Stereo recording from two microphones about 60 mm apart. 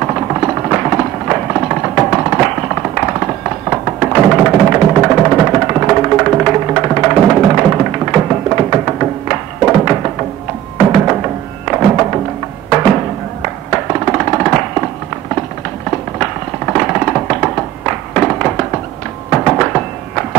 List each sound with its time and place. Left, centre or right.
0.0 s music: centre
12.9 s music: centre
16.6 s music: centre